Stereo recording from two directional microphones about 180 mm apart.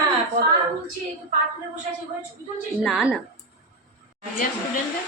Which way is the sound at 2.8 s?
Centre (ahead or behind).